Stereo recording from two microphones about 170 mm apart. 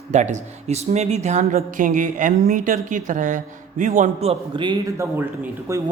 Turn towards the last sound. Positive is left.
turn(degrees=-15)  # may be behind; listen again after turning